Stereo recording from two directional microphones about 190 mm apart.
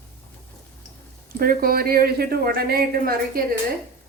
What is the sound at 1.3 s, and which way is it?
A woman's voice, 50° right (ahead or behind).